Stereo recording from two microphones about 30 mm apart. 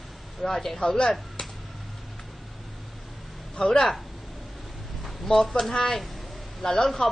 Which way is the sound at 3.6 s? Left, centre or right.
Centre.